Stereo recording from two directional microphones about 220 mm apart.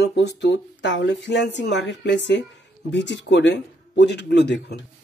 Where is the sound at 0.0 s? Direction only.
50° left (ahead or behind).